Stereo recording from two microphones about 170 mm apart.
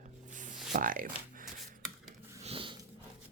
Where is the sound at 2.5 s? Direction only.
30° right (ahead or behind).